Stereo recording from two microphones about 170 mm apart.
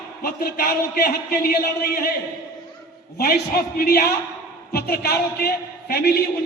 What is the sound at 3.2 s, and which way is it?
A man's voice, 65° left (ahead or behind).